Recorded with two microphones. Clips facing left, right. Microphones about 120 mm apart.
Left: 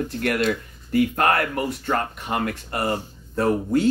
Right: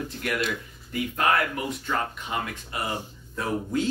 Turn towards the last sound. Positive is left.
turn(degrees=55)  # may be behind; listen again after turning